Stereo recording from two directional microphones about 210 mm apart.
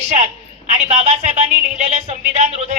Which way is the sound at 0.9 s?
30° right (ahead or behind).